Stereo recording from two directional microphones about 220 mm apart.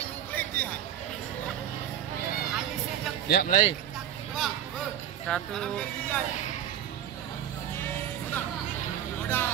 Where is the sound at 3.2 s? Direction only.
40° left (ahead or behind).